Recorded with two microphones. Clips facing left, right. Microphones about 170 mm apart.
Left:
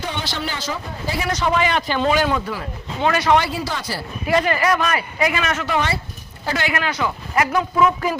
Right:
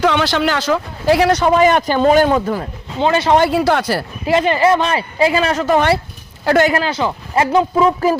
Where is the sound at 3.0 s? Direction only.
30° right (ahead or behind).